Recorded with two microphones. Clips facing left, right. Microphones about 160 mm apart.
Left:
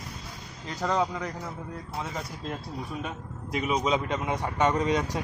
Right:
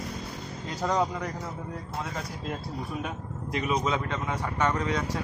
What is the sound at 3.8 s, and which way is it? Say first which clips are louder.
Speech: left 2 dB; 15° left (ahead or behind).